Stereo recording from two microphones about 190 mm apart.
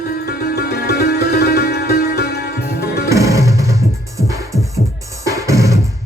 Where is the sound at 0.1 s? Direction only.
55° left (ahead or behind).